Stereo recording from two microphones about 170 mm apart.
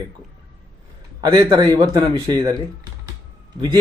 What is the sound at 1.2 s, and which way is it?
Speech, 25° right (ahead or behind).